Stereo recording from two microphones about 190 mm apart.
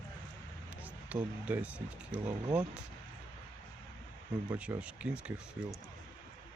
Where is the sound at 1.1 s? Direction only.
5° right (ahead or behind).